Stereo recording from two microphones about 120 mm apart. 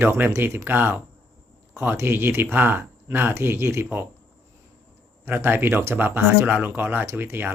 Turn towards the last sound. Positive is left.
turn(degrees=-20)  # may be behind; listen again after turning